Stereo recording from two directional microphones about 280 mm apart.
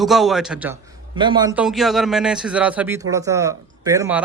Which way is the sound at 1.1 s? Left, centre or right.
Centre.